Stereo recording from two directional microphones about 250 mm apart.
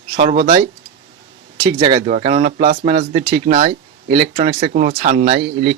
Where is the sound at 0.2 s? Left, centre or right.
Right.